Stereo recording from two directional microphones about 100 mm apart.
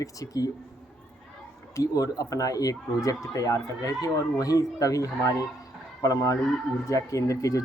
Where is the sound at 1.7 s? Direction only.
35° left (ahead or behind).